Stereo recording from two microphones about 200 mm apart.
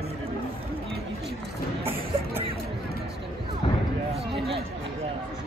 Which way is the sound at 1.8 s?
30° right (ahead or behind).